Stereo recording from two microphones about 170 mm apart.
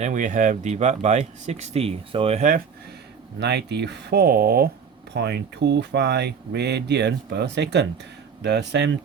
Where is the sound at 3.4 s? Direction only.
75° right (ahead or behind); by 4.7 s 60° right (ahead or behind).